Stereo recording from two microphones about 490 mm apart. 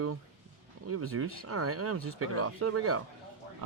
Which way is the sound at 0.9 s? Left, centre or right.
Right.